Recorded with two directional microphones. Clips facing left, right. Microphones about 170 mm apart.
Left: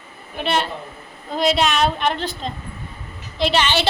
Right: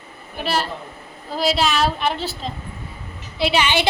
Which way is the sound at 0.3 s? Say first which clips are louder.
Left 1 dB; 5° right (ahead or behind).